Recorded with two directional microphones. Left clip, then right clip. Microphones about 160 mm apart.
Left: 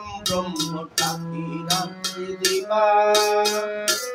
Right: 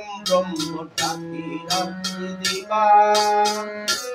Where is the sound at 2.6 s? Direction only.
20° left (ahead or behind).